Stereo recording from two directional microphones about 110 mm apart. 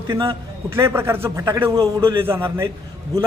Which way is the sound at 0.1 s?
25° right (ahead or behind).